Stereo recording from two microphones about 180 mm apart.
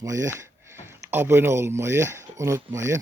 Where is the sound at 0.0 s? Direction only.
20° right (ahead or behind).